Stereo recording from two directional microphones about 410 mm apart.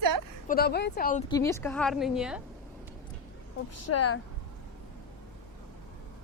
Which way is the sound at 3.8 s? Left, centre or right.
Left.